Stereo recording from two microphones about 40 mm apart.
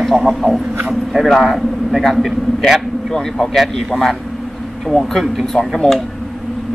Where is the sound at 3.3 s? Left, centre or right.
Centre.